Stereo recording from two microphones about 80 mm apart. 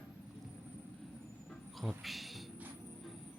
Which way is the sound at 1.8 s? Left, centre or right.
Centre.